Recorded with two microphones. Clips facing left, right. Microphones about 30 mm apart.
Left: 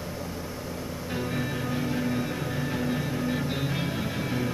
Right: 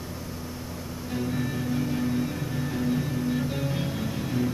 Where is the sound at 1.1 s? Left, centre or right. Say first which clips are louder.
Right 2 dB; centre.